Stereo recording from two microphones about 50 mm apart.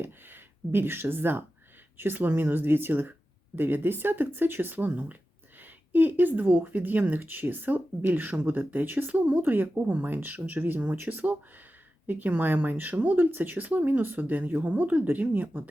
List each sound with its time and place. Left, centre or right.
0.0 s speech: right
9.7 s speech: right